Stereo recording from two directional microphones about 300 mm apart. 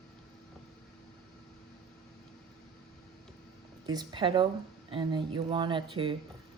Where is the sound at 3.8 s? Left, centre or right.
Centre.